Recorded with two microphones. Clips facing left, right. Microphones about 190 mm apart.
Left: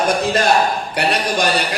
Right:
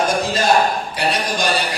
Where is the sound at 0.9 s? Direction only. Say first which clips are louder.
Left 2 dB; 60° left (ahead or behind).